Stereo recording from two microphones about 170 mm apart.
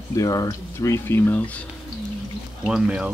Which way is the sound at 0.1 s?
20° left (ahead or behind).